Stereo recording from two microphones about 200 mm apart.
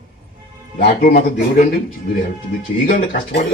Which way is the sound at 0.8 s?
45° left (ahead or behind).